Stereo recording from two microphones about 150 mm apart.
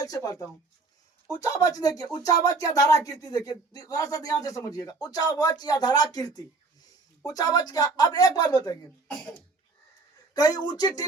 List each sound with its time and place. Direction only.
0.0 s speech: 25° left (ahead or behind)
10.3 s speech: 25° left (ahead or behind)